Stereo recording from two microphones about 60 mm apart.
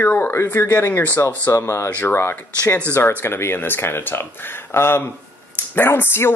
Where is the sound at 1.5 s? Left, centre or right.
Left.